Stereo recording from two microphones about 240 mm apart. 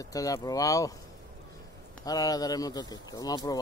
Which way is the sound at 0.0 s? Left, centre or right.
Centre.